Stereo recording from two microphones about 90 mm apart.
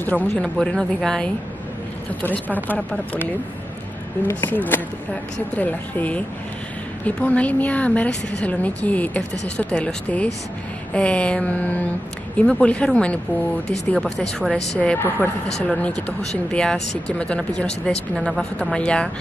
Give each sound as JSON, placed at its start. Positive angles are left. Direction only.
{"t": 0.0, "sound": "speech", "side_deg": 20}
{"t": 0.3, "sound": "a woman's voice", "side_deg": 10}
{"t": 2.2, "sound": "speech", "side_deg": 20}
{"t": 4.3, "sound": "a woman's voice", "side_deg": 25}
{"t": 15.0, "sound": "speech", "side_deg": 25}
{"t": 15.6, "sound": "a woman's voice", "side_deg": 10}